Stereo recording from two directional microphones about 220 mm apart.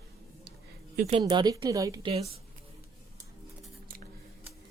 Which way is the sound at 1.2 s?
20° right (ahead or behind).